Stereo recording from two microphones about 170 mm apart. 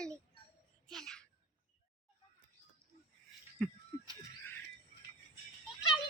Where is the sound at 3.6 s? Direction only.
5° left (ahead or behind).